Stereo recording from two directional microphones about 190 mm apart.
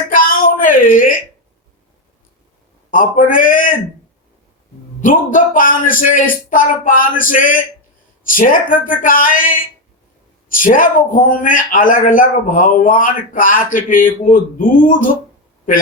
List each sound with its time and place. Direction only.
0.1 s a sound: 45° left (ahead or behind)
2.9 s a man's voice: 45° left (ahead or behind)
4.9 s a man's voice: 45° left (ahead or behind)